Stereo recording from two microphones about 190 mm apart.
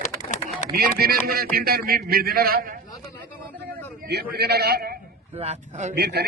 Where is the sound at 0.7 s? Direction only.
55° right (ahead or behind).